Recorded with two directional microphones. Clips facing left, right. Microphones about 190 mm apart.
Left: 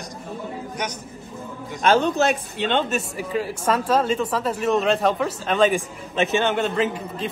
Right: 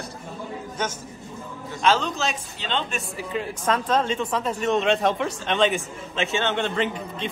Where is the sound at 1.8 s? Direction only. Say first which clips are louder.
Left 5 dB; 55° left (ahead or behind).